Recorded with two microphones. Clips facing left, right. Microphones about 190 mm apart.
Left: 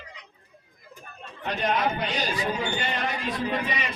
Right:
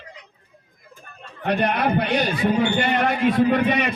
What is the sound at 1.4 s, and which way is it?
A man's voice, 60° right (ahead or behind).